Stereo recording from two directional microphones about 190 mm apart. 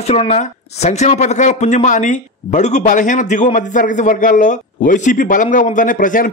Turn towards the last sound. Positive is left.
turn(degrees=45)  # may be behind; listen again after turning